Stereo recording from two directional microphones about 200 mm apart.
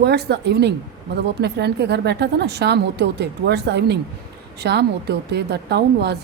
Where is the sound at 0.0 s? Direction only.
55° right (ahead or behind).